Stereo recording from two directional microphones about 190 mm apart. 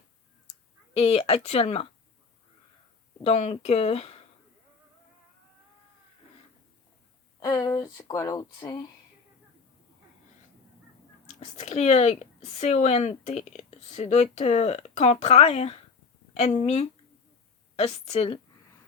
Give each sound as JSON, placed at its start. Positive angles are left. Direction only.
{"t": 0.9, "sound": "speech", "side_deg": 30}
{"t": 3.2, "sound": "speech", "side_deg": 35}
{"t": 7.3, "sound": "speech", "side_deg": 20}
{"t": 11.3, "sound": "speech", "side_deg": 35}